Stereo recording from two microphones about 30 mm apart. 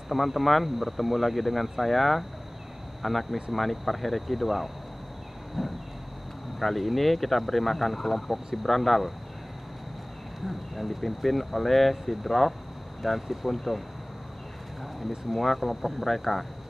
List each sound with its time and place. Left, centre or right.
0.1 s speech: centre
10.4 s speech: centre
13.0 s speech: centre
15.3 s speech: centre